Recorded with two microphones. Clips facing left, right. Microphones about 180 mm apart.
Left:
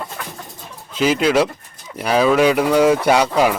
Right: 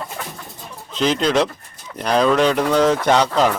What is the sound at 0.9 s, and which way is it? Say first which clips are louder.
Speech: left 2 dB; 5° left (ahead or behind).